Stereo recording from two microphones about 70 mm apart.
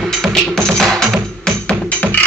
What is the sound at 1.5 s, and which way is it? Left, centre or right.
Music, centre.